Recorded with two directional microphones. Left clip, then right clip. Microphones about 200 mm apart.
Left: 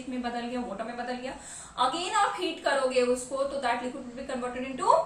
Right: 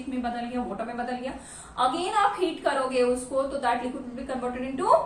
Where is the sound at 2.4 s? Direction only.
Centre (ahead or behind).